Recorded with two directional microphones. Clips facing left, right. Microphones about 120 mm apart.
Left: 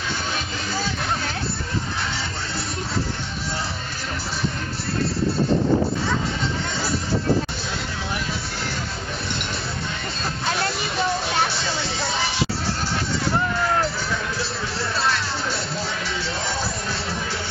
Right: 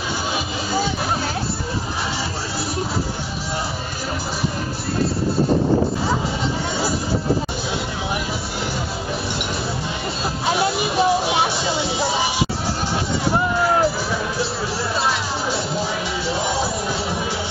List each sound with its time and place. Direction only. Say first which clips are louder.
10.4 s music: right 6 dB; 10° right (ahead or behind)
13.5 s music: right 4 dB; 20° right (ahead or behind)
15.0 s music: right 1 dB; 15° right (ahead or behind)